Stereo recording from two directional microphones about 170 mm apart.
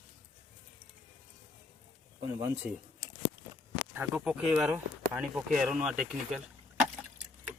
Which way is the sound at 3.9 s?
10° right (ahead or behind).